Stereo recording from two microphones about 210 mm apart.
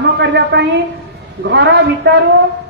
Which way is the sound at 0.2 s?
55° right (ahead or behind).